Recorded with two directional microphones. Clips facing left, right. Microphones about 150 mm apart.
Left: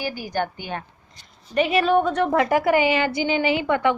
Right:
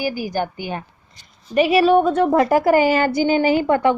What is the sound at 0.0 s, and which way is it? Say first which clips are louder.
A woman's voice: right 4 dB; 10° right (ahead or behind).